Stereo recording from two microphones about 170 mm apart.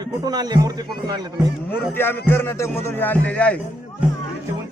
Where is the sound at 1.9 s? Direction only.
10° left (ahead or behind).